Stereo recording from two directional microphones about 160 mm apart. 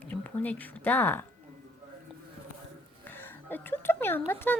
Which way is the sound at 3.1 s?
10° left (ahead or behind).